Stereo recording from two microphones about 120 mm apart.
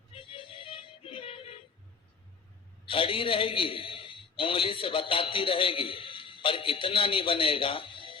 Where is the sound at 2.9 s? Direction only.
50° left (ahead or behind).